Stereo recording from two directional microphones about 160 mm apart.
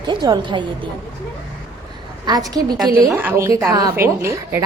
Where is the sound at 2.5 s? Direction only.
25° right (ahead or behind).